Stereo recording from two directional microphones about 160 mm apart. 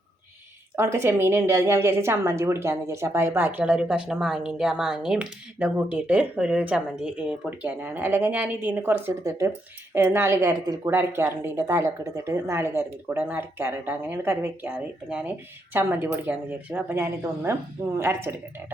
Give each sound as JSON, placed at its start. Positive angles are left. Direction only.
{"t": 0.8, "sound": "speech", "side_deg": -15}